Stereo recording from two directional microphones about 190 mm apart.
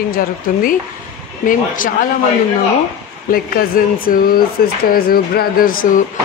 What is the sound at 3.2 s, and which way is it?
Speech, 50° left (ahead or behind).